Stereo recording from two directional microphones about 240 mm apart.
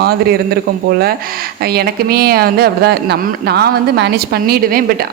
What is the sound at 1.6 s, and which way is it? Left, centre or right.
Speech, right.